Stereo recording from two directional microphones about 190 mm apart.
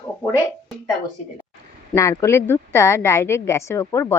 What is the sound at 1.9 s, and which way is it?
A woman's voice, 15° left (ahead or behind).